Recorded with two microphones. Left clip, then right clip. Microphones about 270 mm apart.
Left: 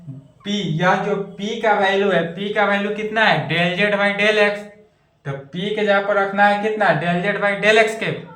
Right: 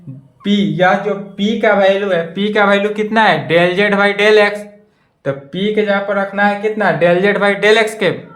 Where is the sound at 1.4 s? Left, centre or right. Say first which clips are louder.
Right 6 dB; right.